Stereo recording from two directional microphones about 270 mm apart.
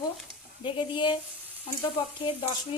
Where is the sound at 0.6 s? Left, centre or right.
Centre.